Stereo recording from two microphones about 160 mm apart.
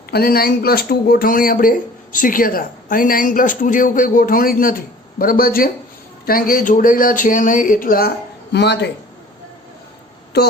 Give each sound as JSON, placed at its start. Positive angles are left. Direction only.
{"t": 0.1, "sound": "speech", "side_deg": 70}
{"t": 8.5, "sound": "speech", "side_deg": 90}